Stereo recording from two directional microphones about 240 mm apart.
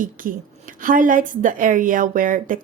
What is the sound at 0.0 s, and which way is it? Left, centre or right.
Speech, right.